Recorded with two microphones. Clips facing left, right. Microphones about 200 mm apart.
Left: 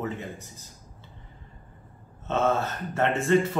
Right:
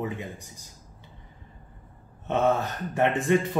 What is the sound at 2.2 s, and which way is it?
Speech, 15° right (ahead or behind).